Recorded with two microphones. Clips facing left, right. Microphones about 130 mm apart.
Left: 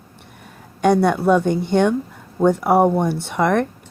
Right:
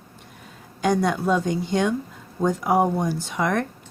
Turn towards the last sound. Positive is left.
turn(degrees=60)  # may be behind; listen again after turning